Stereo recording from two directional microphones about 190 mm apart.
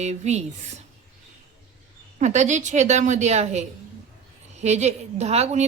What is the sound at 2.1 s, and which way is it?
Speech, 40° right (ahead or behind).